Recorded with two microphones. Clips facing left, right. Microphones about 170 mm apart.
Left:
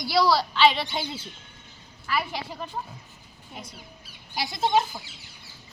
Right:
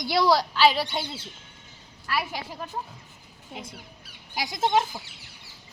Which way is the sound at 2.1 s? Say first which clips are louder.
Left 1 dB; 10° right (ahead or behind).